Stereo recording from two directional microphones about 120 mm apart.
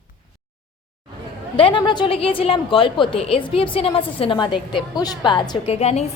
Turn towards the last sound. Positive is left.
turn(degrees=60)  # may be behind; listen again after turning